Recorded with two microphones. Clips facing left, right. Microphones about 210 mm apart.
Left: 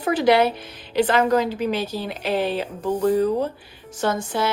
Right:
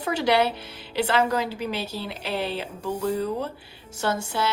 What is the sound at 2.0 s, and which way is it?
Speech, 50° left (ahead or behind).